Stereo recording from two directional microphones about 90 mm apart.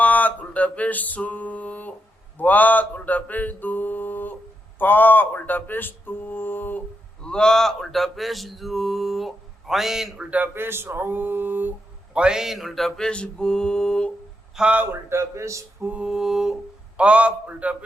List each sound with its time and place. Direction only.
0.0 s music: 20° left (ahead or behind)
2.4 s speech: 20° left (ahead or behind)
7.2 s male singing: 10° left (ahead or behind); by 11.7 s 20° right (ahead or behind)
12.1 s mantra: 10° right (ahead or behind); by 14.1 s 10° left (ahead or behind)
14.5 s a man's voice: 15° right (ahead or behind)
14.9 s speech: 30° right (ahead or behind)
15.9 s a man's voice: 10° right (ahead or behind)